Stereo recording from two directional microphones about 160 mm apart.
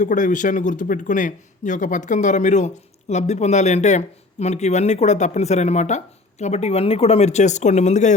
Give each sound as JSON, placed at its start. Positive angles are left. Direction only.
{"t": 0.0, "sound": "speech", "side_deg": 50}